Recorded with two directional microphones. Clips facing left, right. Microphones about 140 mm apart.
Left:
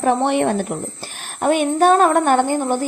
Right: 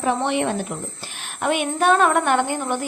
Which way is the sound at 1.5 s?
40° left (ahead or behind).